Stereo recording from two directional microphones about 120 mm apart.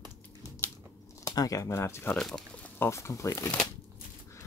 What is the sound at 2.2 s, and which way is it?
Speech, 5° left (ahead or behind).